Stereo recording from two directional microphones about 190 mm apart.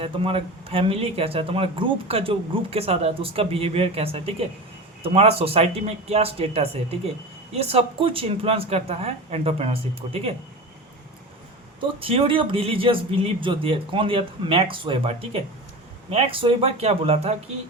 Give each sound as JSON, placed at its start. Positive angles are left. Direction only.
{"t": 0.0, "sound": "speech", "side_deg": -30}
{"t": 11.8, "sound": "speech", "side_deg": -30}